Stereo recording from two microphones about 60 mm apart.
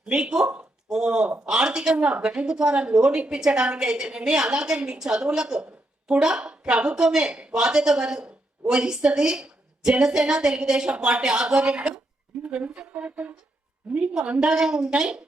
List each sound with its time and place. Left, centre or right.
0.0 s a woman's voice: centre